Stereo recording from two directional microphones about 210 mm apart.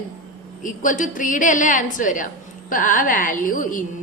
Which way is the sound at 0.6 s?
40° left (ahead or behind).